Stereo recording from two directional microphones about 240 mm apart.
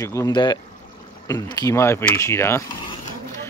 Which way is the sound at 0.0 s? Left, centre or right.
Centre.